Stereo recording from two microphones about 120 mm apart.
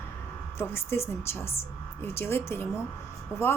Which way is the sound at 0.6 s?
20° left (ahead or behind).